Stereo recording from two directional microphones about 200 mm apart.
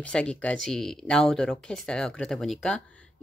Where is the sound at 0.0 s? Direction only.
5° left (ahead or behind).